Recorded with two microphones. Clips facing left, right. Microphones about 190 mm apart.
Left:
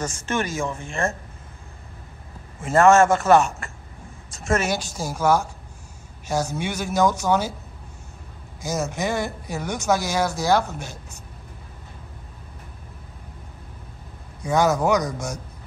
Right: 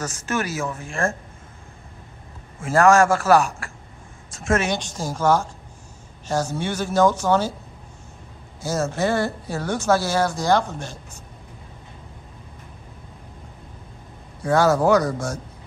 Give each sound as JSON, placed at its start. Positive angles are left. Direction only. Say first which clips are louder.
{"t": 0.3, "sound": "a woman's voice", "louder": "even", "side_deg": -5}
{"t": 2.6, "sound": "a woman's voice", "louder": "left 1 dB", "side_deg": 0}
{"t": 8.5, "sound": "speech", "louder": "right 3 dB", "side_deg": 15}
{"t": 14.4, "sound": "speech", "louder": "right 2 dB", "side_deg": 15}